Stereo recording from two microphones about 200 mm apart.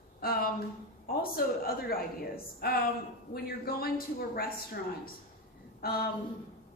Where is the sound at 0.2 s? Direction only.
50° left (ahead or behind).